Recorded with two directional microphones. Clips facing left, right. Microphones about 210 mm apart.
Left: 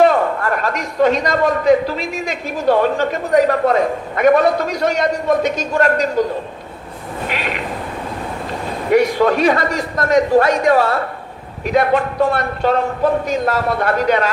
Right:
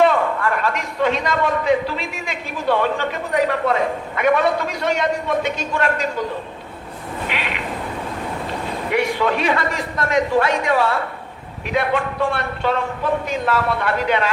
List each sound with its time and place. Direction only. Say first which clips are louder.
0.0 s a man's voice: left 3 dB; 40° left (ahead or behind)
7.3 s a sound: left 5 dB; 40° left (ahead or behind)
8.9 s a man's voice: left 7 dB; 40° left (ahead or behind)